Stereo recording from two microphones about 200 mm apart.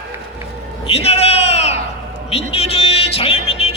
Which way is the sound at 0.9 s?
30° left (ahead or behind).